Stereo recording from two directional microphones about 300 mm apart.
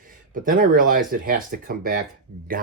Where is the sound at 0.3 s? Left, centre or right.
Right.